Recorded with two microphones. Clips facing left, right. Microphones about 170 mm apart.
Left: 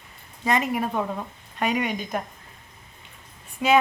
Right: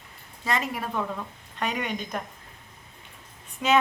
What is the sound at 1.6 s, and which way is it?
Speech, 10° left (ahead or behind).